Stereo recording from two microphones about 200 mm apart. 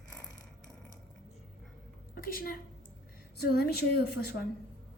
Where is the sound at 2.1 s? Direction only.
45° left (ahead or behind).